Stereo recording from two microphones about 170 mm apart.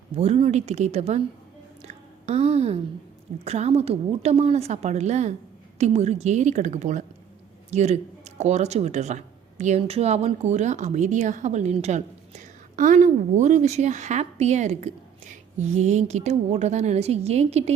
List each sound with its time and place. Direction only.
0.2 s a woman's voice: 35° right (ahead or behind)
1.8 s a sound: 40° right (ahead or behind)
3.4 s a woman's voice: 40° right (ahead or behind)